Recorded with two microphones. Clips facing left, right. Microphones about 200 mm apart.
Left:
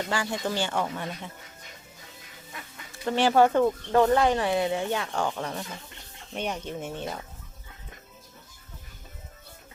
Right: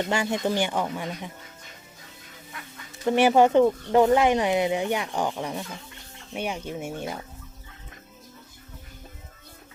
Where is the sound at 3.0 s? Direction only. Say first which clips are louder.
Right 3 dB; 15° right (ahead or behind).